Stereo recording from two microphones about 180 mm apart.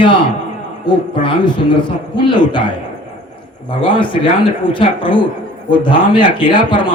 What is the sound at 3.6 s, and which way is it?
A man's voice, 25° left (ahead or behind).